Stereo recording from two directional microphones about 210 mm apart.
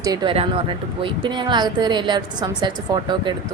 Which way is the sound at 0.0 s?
20° right (ahead or behind).